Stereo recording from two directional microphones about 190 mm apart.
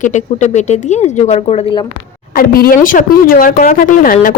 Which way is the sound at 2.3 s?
50° left (ahead or behind).